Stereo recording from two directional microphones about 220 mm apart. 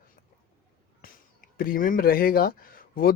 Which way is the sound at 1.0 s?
40° left (ahead or behind).